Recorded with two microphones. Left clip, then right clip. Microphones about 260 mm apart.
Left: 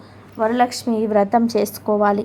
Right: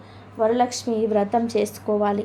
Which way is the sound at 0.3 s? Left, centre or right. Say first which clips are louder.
Left 2 dB; left.